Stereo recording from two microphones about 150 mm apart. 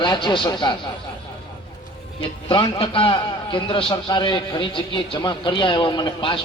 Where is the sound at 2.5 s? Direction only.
35° left (ahead or behind).